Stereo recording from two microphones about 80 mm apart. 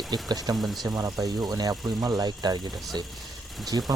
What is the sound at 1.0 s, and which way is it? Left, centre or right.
Speech, right.